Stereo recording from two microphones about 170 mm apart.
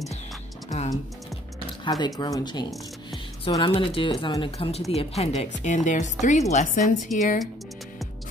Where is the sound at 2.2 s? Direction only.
25° left (ahead or behind); by 6.8 s 45° left (ahead or behind).